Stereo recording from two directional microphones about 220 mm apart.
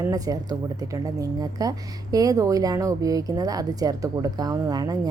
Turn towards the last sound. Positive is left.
turn(degrees=-15)  # may be behind; listen again after turning